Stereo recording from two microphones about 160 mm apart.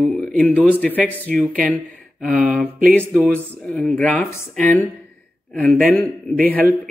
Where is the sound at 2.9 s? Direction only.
5° left (ahead or behind).